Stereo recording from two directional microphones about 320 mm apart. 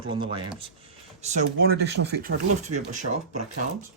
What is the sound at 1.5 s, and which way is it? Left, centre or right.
Speech, right.